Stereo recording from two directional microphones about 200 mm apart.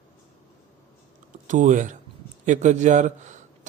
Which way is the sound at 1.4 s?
40° right (ahead or behind).